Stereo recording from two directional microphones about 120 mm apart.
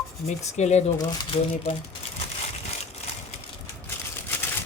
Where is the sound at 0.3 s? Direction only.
70° left (ahead or behind).